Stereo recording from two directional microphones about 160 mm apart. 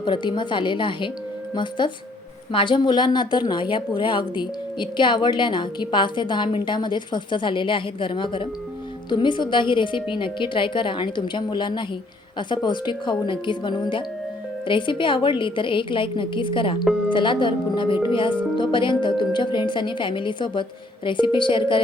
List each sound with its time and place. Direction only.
0.0 s a woman's voice: 30° left (ahead or behind)